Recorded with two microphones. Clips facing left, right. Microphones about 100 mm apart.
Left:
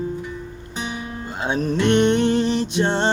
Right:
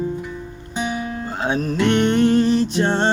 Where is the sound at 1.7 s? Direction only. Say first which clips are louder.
Even; 45° right (ahead or behind).